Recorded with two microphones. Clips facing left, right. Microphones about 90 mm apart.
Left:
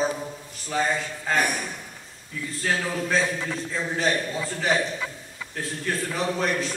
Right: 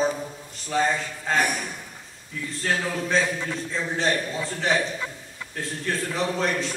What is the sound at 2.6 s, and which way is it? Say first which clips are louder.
A man's voice: even; 5° right (ahead or behind).